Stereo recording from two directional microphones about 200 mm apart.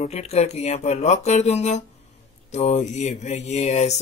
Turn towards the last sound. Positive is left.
turn(degrees=35)  # may be behind; listen again after turning